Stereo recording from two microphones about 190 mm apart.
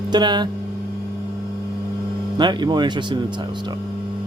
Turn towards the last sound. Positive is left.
turn(degrees=-25)  # may be behind; listen again after turning